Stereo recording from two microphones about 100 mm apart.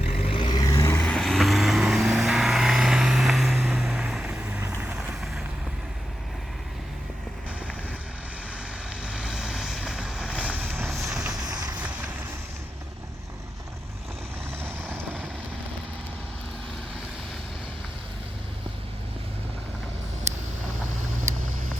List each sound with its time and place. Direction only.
0.3 s vehicle: 55° left (ahead or behind)
0.6 s vehicle: 30° left (ahead or behind)
0.9 s vehicle: 10° left (ahead or behind); by 5.1 s 15° right (ahead or behind)
9.0 s vehicle: 10° right (ahead or behind); by 11.0 s 25° right (ahead or behind)
11.0 s vehicle: 5° right (ahead or behind)
11.3 s vehicle: 40° right (ahead or behind)
11.8 s vehicle: 15° right (ahead or behind)
14.6 s vehicle: 20° right (ahead or behind)